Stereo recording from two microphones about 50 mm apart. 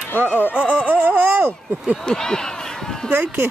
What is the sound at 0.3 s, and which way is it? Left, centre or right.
Speech, left.